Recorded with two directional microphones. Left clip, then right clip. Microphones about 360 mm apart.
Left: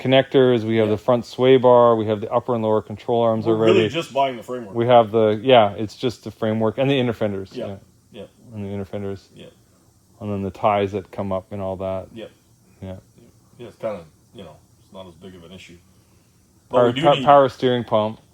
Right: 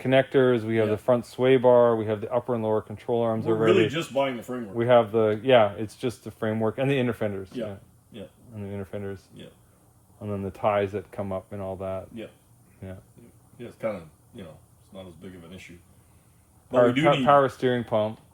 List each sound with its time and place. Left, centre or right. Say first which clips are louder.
0.0 s speech: left 5 dB; left
3.9 s speech: left 5 dB; centre
4.7 s speech: left 5 dB; left
8.5 s speech: left 5 dB; left
14.9 s speech: left 4 dB; centre
16.7 s speech: left 4 dB; left